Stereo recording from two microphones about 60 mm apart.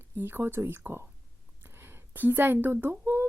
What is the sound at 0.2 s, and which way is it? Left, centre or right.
Speech, right.